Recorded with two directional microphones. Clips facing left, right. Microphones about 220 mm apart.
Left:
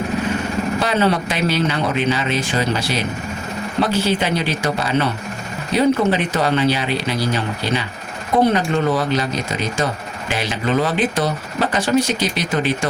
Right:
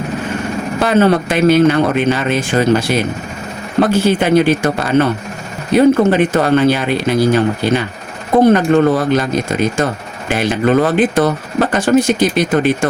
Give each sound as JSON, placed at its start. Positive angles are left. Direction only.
{"t": 0.8, "sound": "speech", "side_deg": -50}